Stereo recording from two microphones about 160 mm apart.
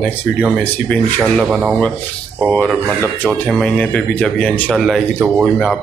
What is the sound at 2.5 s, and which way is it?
Speech, 10° left (ahead or behind).